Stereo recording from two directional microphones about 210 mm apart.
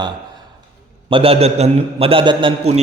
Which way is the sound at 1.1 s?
25° right (ahead or behind).